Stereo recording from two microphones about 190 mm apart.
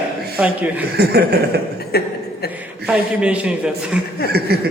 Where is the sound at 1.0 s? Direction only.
60° right (ahead or behind).